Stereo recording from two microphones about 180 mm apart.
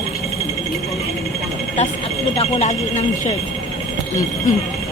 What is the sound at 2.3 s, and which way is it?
Speech, 35° left (ahead or behind).